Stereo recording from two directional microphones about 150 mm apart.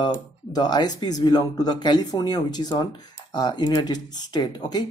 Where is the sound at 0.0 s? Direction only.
30° left (ahead or behind).